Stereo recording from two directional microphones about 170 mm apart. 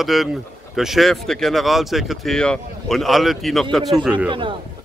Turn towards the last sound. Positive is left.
turn(degrees=-30)  # may be behind; listen again after turning